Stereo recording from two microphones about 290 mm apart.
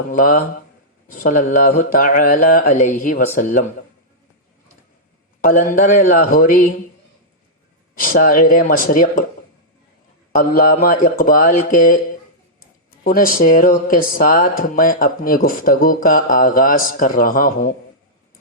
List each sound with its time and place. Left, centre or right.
0.1 s speech: left
5.4 s speech: left
7.9 s speech: left
10.3 s speech: left
13.1 s speech: left